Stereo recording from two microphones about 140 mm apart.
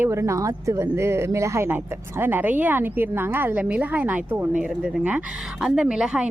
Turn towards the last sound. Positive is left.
turn(degrees=-5)  # may be behind; listen again after turning